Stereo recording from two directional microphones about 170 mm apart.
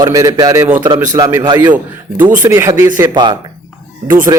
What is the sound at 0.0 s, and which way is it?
A man's voice, 20° right (ahead or behind).